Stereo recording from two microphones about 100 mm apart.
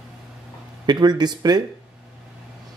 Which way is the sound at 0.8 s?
45° right (ahead or behind).